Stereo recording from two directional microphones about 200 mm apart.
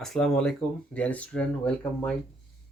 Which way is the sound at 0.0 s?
Centre (ahead or behind).